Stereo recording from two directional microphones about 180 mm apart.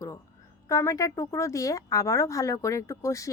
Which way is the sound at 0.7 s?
15° left (ahead or behind).